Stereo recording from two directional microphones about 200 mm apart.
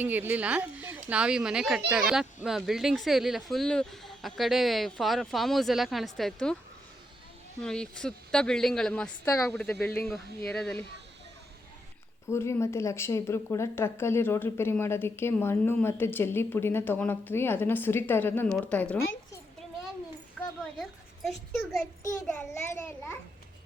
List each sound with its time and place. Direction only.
0.0 s speech: 10° right (ahead or behind)
7.6 s speech: 5° left (ahead or behind)
9.2 s speech: 15° left (ahead or behind)
9.6 s speech: 5° left (ahead or behind)
12.3 s speech: 15° left (ahead or behind)
21.2 s speech: centre (ahead or behind)